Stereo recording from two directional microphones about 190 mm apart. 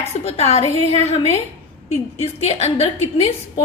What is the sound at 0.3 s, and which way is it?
A woman's voice, 35° left (ahead or behind).